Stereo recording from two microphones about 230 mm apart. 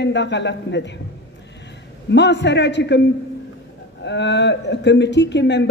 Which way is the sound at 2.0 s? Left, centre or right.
Left.